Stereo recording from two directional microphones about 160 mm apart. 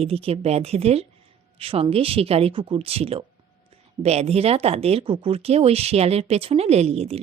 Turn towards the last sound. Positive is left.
turn(degrees=-40)  # may be behind; listen again after turning